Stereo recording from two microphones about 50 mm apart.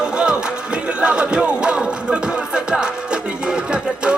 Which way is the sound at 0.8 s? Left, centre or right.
Right.